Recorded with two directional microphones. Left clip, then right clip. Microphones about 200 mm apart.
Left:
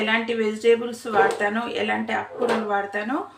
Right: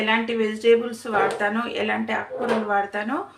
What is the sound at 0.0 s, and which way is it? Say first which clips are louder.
Speech: even; 10° right (ahead or behind).